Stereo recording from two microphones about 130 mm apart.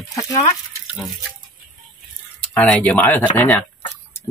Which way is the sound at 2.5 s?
10° left (ahead or behind).